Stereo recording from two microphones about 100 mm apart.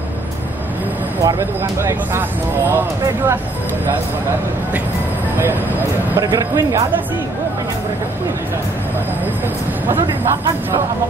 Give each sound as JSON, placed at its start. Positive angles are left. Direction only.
{"t": 1.2, "sound": "speech", "side_deg": -30}
{"t": 6.1, "sound": "speech", "side_deg": -25}